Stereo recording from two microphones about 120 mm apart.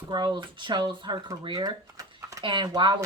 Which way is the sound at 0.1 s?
40° right (ahead or behind).